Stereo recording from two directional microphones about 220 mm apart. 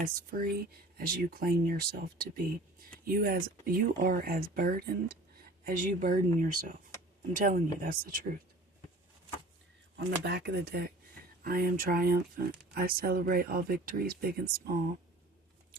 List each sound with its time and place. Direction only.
0.1 s speech: 40° right (ahead or behind)
10.0 s speech: 50° right (ahead or behind)